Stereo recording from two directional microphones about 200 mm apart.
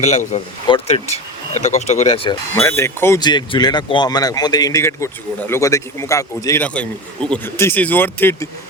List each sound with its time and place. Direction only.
0.0 s speech: 35° left (ahead or behind)
2.6 s speech: 15° left (ahead or behind)